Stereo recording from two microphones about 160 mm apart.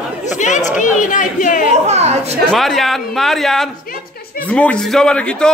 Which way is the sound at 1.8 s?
45° right (ahead or behind).